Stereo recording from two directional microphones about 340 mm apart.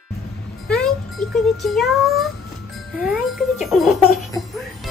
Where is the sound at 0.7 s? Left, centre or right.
Centre.